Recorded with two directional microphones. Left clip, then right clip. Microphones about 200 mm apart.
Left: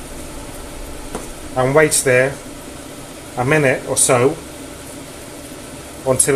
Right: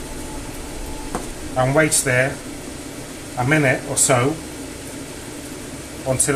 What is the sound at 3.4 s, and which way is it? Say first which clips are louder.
Speech: left 3 dB; 35° left (ahead or behind).